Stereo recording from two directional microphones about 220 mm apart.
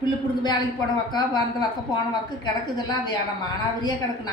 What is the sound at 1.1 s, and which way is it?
Speech, 20° left (ahead or behind).